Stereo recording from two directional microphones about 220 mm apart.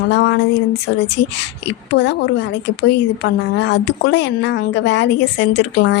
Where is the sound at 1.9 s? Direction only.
50° left (ahead or behind).